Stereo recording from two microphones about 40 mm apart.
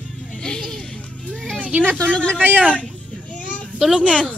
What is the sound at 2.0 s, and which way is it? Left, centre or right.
Speech, left.